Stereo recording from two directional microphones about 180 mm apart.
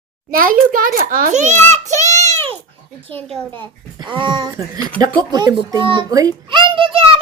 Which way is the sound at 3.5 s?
25° right (ahead or behind).